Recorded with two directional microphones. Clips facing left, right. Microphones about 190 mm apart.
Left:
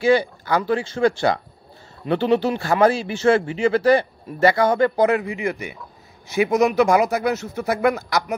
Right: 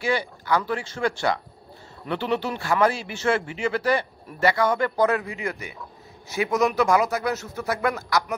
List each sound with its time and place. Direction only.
0.0 s speech: 30° left (ahead or behind)
5.0 s speech: 10° left (ahead or behind)